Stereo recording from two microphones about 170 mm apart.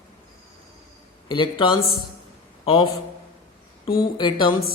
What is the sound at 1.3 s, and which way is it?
A man's voice, 30° left (ahead or behind).